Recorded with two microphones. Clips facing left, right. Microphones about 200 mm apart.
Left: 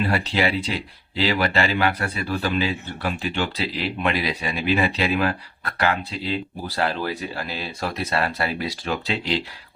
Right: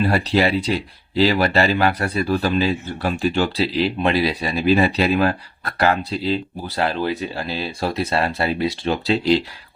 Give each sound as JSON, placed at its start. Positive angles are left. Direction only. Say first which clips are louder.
{"t": 0.1, "sound": "speech", "louder": "right 4 dB", "side_deg": -40}
{"t": 6.7, "sound": "speech", "louder": "right 3 dB", "side_deg": -25}